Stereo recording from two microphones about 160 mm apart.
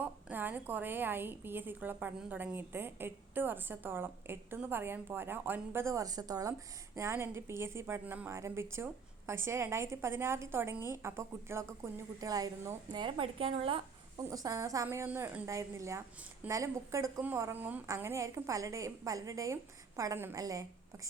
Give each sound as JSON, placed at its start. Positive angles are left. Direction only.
{"t": 0.0, "sound": "a woman's voice", "side_deg": -10}
{"t": 14.3, "sound": "a woman's voice", "side_deg": -20}